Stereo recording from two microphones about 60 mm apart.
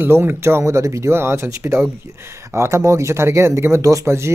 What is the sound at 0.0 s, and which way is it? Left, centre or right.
Speech, right.